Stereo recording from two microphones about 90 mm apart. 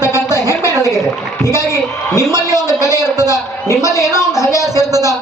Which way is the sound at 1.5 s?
45° right (ahead or behind).